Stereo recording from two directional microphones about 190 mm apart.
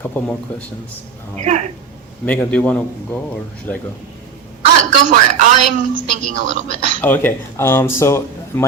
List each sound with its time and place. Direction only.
0.0 s speech: 10° left (ahead or behind)
2.2 s speech: 5° left (ahead or behind)
4.8 s a woman's voice: 40° right (ahead or behind)
7.0 s speech: 10° left (ahead or behind)